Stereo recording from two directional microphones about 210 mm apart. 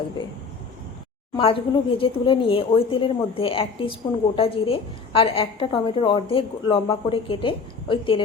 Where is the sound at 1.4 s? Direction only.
25° left (ahead or behind).